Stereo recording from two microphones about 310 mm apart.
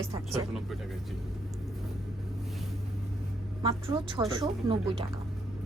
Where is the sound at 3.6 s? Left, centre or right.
Centre.